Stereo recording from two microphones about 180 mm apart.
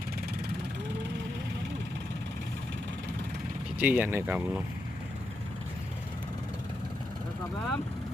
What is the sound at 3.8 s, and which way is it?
Speech, 10° right (ahead or behind).